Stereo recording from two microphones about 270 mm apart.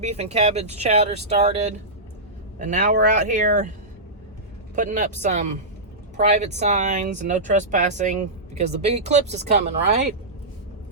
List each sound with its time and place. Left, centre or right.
0.0 s speech: right
4.7 s speech: right